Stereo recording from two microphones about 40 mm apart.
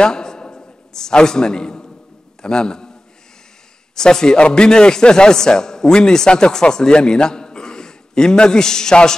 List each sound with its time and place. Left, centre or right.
0.0 s a sound: centre
2.4 s a man's voice: centre
3.9 s a man's voice: centre